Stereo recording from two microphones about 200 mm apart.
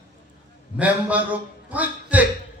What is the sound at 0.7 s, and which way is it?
A man's voice, 5° right (ahead or behind).